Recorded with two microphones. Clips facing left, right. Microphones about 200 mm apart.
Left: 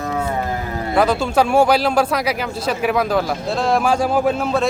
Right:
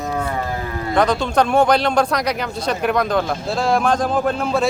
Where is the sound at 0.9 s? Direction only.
5° left (ahead or behind).